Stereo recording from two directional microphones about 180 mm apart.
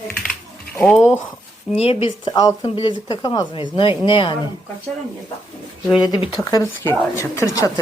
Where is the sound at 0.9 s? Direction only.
5° right (ahead or behind).